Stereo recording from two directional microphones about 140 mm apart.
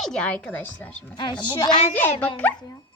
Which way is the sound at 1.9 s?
15° left (ahead or behind).